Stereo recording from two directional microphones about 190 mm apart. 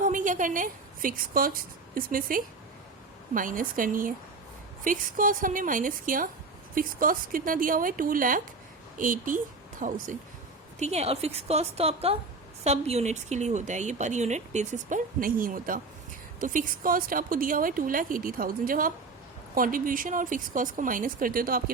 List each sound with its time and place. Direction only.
0.0 s a woman's voice: 40° right (ahead or behind)